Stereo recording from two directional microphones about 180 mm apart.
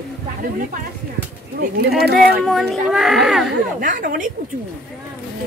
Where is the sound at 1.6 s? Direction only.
65° right (ahead or behind).